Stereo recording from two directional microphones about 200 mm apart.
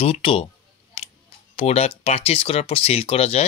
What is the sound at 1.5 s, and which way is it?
Speech, 30° left (ahead or behind).